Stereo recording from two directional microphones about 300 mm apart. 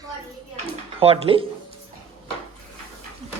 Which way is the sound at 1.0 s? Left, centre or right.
Centre.